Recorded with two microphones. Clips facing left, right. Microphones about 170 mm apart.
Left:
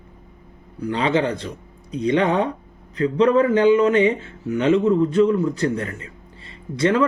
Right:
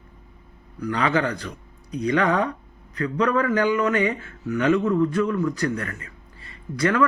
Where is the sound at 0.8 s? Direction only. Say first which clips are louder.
Left 2 dB; 25° left (ahead or behind).